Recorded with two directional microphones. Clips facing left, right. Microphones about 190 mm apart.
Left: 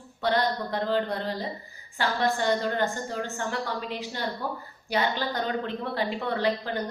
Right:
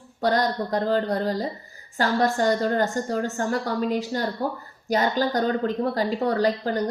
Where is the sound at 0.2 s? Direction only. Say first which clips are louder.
Right 3 dB; 40° right (ahead or behind).